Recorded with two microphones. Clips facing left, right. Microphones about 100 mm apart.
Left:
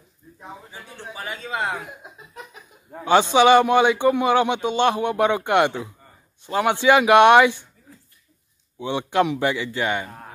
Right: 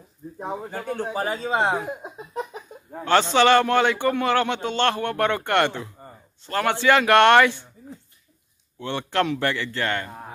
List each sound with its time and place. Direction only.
0.4 s speech: 50° right (ahead or behind); by 2.6 s 30° right (ahead or behind)
3.1 s a man's voice: 15° left (ahead or behind)
8.7 s a man's voice: 15° left (ahead or behind)